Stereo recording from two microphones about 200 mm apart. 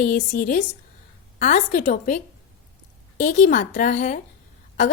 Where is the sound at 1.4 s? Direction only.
40° left (ahead or behind).